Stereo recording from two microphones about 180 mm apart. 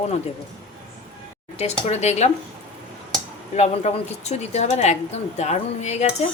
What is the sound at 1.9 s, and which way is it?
Speech, 40° left (ahead or behind).